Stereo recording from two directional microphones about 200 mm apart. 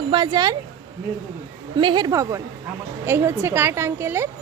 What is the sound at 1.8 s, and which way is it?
A woman's voice, 20° right (ahead or behind).